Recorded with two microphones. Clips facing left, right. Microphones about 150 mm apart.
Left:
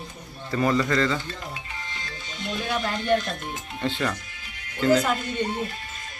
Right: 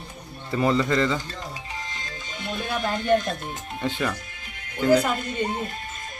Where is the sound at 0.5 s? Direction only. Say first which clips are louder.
Right 1 dB; 20° right (ahead or behind).